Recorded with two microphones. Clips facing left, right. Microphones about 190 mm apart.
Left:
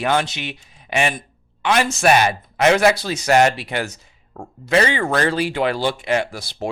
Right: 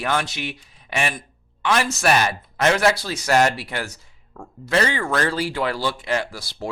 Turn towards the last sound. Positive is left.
turn(degrees=20)  # may be behind; listen again after turning